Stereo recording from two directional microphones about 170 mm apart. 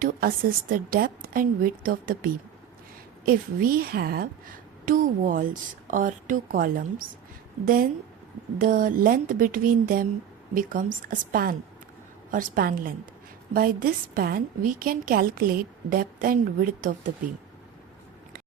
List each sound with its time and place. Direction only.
0.0 s a woman's voice: 55° right (ahead or behind)
8.6 s a woman's voice: 50° right (ahead or behind)